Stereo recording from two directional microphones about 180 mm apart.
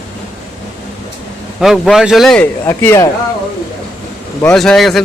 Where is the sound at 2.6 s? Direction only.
15° left (ahead or behind).